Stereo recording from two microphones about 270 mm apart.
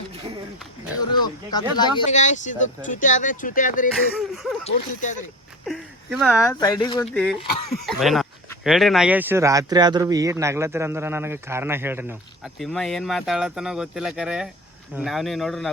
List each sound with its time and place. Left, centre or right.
0.9 s a sound: centre
1.7 s speech: left
5.6 s speech: centre
6.3 s speech: centre
7.0 s speech: centre